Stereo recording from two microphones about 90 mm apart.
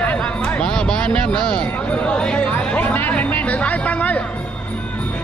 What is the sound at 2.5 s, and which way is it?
Speech, 20° left (ahead or behind).